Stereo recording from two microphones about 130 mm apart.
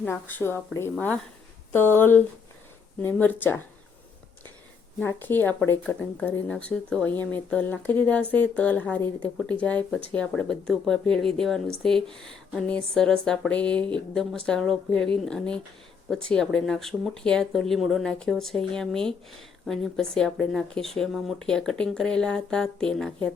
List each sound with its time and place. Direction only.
0.0 s speech: 15° left (ahead or behind)
4.9 s speech: 15° left (ahead or behind)